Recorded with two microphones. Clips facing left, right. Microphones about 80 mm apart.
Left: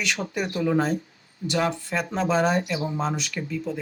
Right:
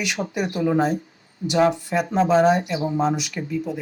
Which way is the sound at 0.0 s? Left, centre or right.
Centre.